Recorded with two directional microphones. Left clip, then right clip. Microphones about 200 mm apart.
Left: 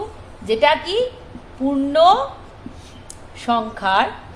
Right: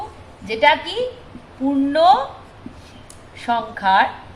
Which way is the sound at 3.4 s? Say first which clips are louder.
Even; 35° left (ahead or behind).